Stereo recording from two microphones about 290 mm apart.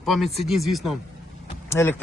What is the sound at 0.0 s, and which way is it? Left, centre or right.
Speech, centre.